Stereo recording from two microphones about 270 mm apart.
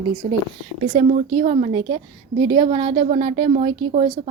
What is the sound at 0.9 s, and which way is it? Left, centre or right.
A woman's voice, right.